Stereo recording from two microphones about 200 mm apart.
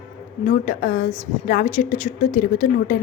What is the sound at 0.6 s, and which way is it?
A woman's voice, 40° left (ahead or behind).